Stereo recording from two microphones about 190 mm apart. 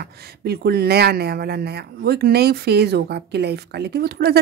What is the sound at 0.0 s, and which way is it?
Speech, 55° right (ahead or behind).